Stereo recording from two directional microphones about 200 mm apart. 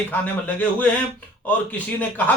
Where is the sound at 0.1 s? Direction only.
10° left (ahead or behind).